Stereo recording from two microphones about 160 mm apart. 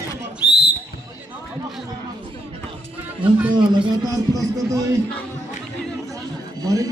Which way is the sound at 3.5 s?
30° right (ahead or behind).